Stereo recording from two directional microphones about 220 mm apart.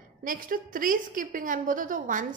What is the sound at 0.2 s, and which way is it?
A woman's voice, 40° right (ahead or behind).